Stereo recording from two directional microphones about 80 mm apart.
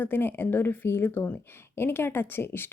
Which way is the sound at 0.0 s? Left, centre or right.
Left.